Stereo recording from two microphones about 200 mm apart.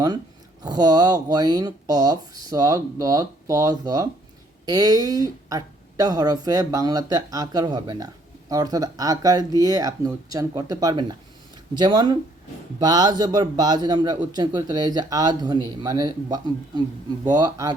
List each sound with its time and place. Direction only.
0.6 s speech: 20° right (ahead or behind)